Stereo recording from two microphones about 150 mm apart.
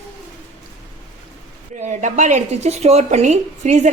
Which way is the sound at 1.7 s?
55° right (ahead or behind).